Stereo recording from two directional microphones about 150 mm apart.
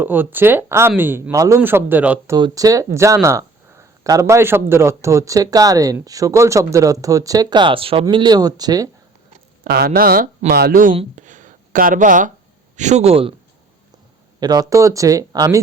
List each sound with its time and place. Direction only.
0.0 s speech: 15° right (ahead or behind)
2.3 s speech: 25° right (ahead or behind)
9.6 s speech: 90° right; by 10.9 s 70° right (ahead or behind)
10.9 s speech: 55° right (ahead or behind)
14.3 s speech: 25° right (ahead or behind)